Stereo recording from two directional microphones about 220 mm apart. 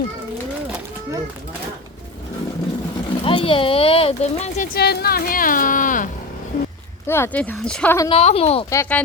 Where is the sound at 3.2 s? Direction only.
25° left (ahead or behind).